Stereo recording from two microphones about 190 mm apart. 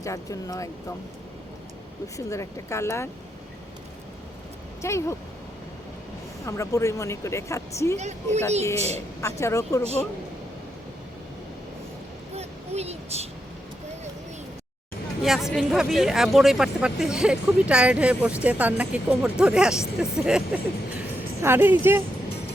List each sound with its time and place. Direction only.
0.0 s speech: 15° left (ahead or behind)
2.1 s speech: 15° left (ahead or behind)
4.8 s speech: 15° left (ahead or behind)
6.4 s speech: 15° left (ahead or behind)
7.9 s a woman's voice: 35° right (ahead or behind)
9.2 s speech: 15° left (ahead or behind)
12.4 s a sound: 35° right (ahead or behind)
15.2 s speech: centre (ahead or behind)